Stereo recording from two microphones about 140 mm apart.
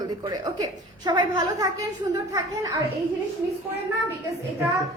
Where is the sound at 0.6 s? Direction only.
30° right (ahead or behind).